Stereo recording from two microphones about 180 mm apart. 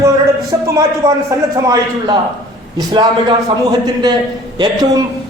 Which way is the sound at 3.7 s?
25° right (ahead or behind).